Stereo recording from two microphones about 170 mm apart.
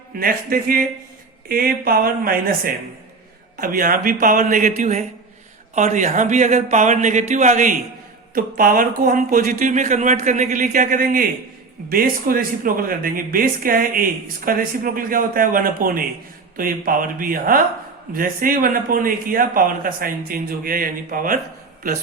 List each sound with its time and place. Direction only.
0.2 s speech: 60° right (ahead or behind)
3.6 s speech: 55° right (ahead or behind)